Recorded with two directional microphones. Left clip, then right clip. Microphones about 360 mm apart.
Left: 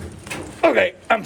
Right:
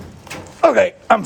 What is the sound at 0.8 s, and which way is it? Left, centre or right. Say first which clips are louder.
Speech: right 4 dB; centre.